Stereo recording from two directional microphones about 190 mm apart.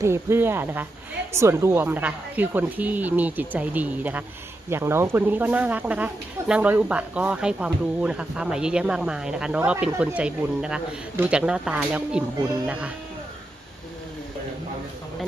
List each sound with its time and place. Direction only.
0.0 s a woman's voice: 15° right (ahead or behind)